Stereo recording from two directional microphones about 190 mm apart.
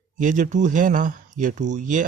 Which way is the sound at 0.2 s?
40° right (ahead or behind).